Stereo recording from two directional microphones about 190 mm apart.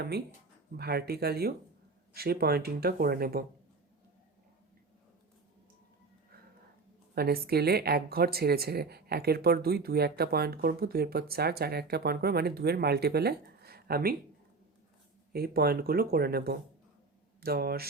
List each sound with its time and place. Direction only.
0.8 s speech: 55° right (ahead or behind)
7.2 s speech: 55° right (ahead or behind)
15.3 s speech: 55° right (ahead or behind)